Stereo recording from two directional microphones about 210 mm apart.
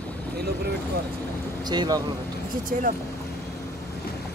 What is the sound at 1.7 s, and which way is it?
Speech, 20° right (ahead or behind).